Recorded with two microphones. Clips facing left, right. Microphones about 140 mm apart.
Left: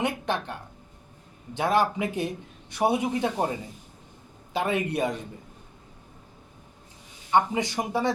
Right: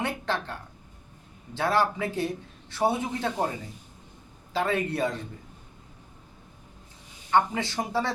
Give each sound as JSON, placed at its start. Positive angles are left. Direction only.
{"t": 0.0, "sound": "speech", "side_deg": 15}
{"t": 1.5, "sound": "speech", "side_deg": 15}
{"t": 4.5, "sound": "a man's voice", "side_deg": 20}
{"t": 7.3, "sound": "speech", "side_deg": 15}